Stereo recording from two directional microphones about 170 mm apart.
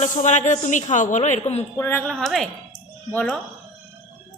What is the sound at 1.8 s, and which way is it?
Speech, 15° left (ahead or behind).